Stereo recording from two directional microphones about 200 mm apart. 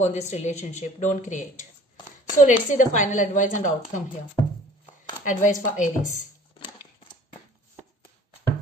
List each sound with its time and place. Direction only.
0.0 s a woman's voice: 35° left (ahead or behind)
4.4 s a sound: 15° left (ahead or behind)
5.2 s a woman's voice: 40° left (ahead or behind)